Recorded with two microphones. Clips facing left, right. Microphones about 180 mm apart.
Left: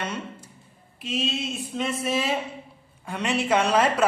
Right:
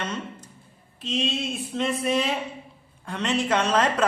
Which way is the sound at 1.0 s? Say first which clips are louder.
Right 1 dB; 5° left (ahead or behind).